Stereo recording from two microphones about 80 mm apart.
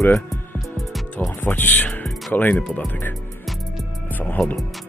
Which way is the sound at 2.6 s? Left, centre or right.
Centre.